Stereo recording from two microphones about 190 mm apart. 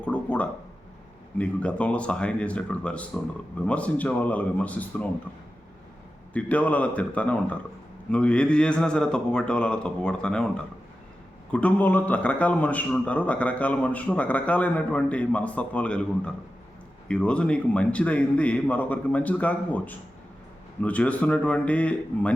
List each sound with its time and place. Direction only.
0.0 s a man's voice: 5° left (ahead or behind)
6.3 s a man's voice: 5° left (ahead or behind)
11.5 s a man's voice: 10° left (ahead or behind)